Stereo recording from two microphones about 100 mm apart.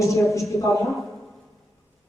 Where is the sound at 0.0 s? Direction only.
30° left (ahead or behind).